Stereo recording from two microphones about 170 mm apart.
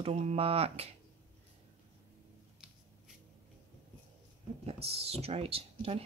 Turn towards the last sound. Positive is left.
turn(degrees=-35)  # may be behind; listen again after turning